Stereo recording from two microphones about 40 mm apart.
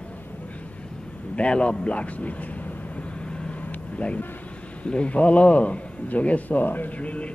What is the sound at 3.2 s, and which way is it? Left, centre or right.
Vehicle, left.